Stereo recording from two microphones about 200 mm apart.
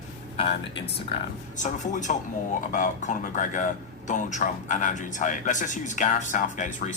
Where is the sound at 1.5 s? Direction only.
40° left (ahead or behind).